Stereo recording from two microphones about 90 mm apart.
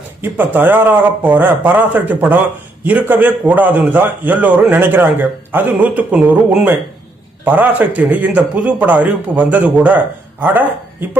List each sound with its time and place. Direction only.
0.2 s a man's voice: 20° right (ahead or behind)